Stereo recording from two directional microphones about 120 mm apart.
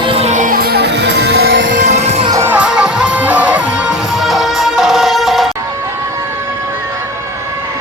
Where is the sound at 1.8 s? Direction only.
70° right (ahead or behind).